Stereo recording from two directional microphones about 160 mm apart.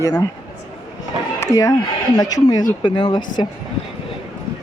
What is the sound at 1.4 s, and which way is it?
Speech, 20° left (ahead or behind).